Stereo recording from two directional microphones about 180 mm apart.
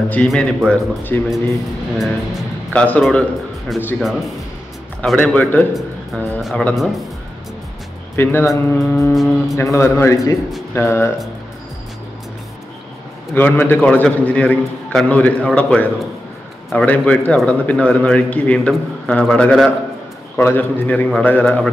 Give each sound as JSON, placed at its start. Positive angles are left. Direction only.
{"t": 0.1, "sound": "a man's voice", "side_deg": 5}
{"t": 8.2, "sound": "a man's voice", "side_deg": 10}
{"t": 9.1, "sound": "a man's voice", "side_deg": 0}
{"t": 9.6, "sound": "a man's voice", "side_deg": 15}
{"t": 13.3, "sound": "a man's voice", "side_deg": 10}